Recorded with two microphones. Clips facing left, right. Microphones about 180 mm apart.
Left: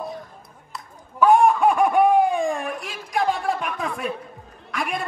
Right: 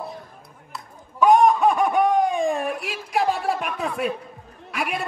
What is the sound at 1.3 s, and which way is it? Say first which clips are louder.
Laughter: even; 10° left (ahead or behind).